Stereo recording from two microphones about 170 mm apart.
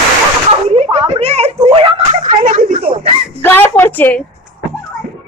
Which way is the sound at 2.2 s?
55° right (ahead or behind).